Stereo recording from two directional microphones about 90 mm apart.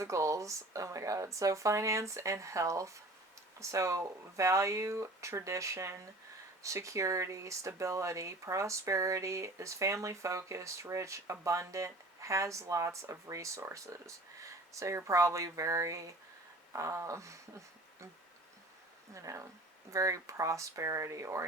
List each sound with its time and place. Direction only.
0.0 s speech: 35° right (ahead or behind)
19.1 s speech: 35° right (ahead or behind)